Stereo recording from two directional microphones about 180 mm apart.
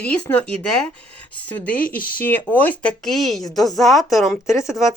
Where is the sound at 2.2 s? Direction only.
10° left (ahead or behind).